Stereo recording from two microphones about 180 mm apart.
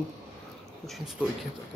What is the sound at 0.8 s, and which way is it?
Speech, centre (ahead or behind).